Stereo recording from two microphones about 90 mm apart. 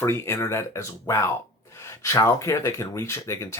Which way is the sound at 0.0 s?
30° left (ahead or behind).